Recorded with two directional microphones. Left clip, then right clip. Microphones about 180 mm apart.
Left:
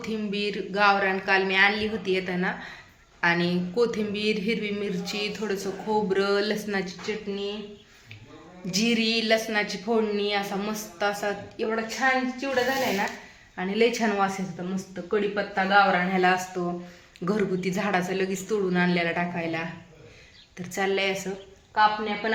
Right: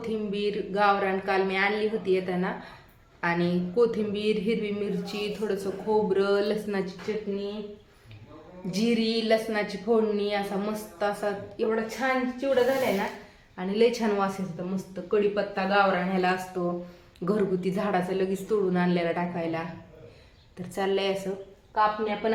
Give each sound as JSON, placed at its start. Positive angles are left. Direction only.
{"t": 0.0, "sound": "speech", "side_deg": -5}
{"t": 8.7, "sound": "speech", "side_deg": 0}
{"t": 13.6, "sound": "speech", "side_deg": 15}